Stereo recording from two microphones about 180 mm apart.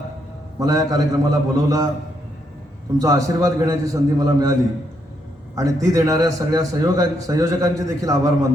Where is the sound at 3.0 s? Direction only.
20° right (ahead or behind).